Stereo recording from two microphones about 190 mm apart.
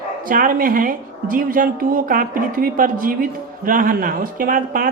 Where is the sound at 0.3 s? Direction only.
45° right (ahead or behind).